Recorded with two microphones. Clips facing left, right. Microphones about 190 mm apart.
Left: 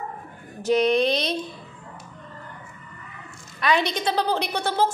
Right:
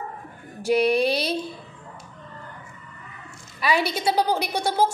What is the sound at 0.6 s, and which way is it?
Speech, 10° right (ahead or behind).